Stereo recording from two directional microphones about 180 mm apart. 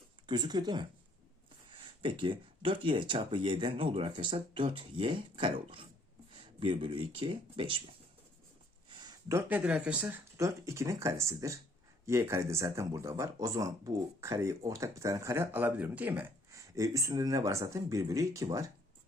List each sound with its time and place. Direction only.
0.3 s speech: 25° right (ahead or behind)
2.0 s speech: 30° right (ahead or behind)
8.9 s a sound: 20° right (ahead or behind)
9.5 s speech: 5° right (ahead or behind)